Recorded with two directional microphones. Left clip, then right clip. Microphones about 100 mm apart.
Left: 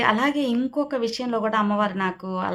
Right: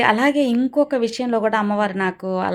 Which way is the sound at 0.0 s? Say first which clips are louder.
Right 5 dB; 45° right (ahead or behind).